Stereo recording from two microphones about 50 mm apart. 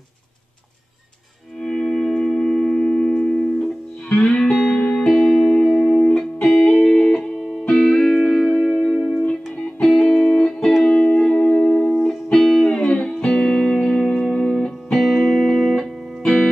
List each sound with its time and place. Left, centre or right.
1.6 s music: centre
8.9 s music: centre
10.0 s music: centre
12.3 s music: centre
12.6 s music: centre
13.7 s music: centre
16.2 s music: centre